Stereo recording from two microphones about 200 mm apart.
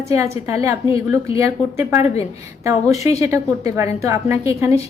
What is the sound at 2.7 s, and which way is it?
A woman's voice, 15° right (ahead or behind).